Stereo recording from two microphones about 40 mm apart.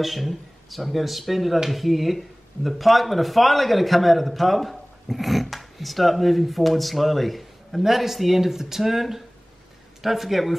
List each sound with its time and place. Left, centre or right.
0.0 s speech: centre